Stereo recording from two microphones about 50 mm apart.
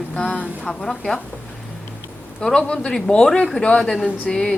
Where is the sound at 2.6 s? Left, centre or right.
Centre.